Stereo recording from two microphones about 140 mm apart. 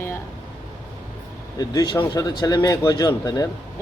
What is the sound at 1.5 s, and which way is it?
Speech, 25° left (ahead or behind).